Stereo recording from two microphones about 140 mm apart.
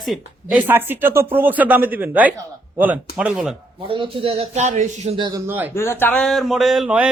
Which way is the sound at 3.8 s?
40° right (ahead or behind).